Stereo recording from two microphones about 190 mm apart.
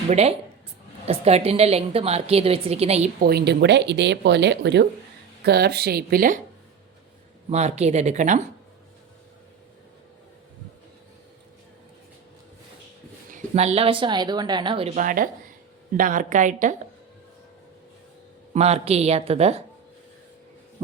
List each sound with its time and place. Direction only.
0.1 s a woman's voice: 35° right (ahead or behind)
3.2 s speech: 60° right (ahead or behind)
7.5 s a woman's voice: 35° right (ahead or behind)
13.3 s a woman's voice: 35° right (ahead or behind)
14.9 s a woman's voice: 45° right (ahead or behind)
18.5 s a woman's voice: 35° right (ahead or behind)